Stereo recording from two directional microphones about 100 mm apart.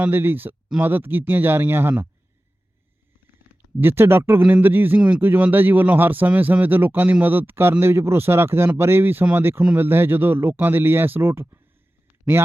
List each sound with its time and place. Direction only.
0.0 s a man's voice: 20° right (ahead or behind)
3.8 s a man's voice: 20° right (ahead or behind)
4.9 s a man's voice: 10° right (ahead or behind)